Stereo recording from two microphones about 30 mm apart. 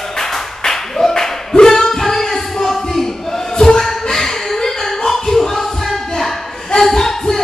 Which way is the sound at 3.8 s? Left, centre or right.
Centre.